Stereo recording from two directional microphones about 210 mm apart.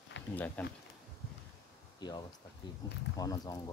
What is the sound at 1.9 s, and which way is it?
Speech, 20° left (ahead or behind).